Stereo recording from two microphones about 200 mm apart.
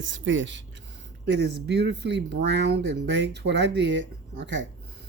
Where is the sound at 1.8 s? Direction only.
60° right (ahead or behind).